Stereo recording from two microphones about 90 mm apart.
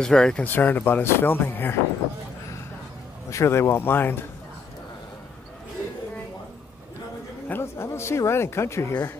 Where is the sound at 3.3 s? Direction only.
30° left (ahead or behind).